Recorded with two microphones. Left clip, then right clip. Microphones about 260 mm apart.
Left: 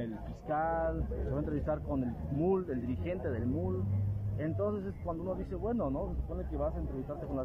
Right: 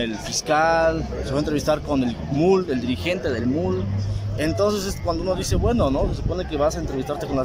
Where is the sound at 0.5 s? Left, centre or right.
Centre.